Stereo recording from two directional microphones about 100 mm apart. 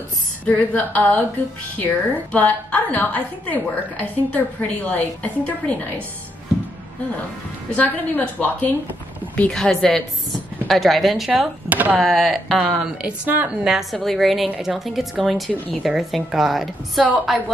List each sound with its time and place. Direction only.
0.5 s a woman's voice: 15° left (ahead or behind)
7.7 s a woman's voice: 15° left (ahead or behind); by 11.4 s centre (ahead or behind)
11.7 s speech: 15° right (ahead or behind)
12.0 s a woman's voice: centre (ahead or behind)
12.7 s speech: 15° right (ahead or behind)
13.7 s a woman's voice: centre (ahead or behind)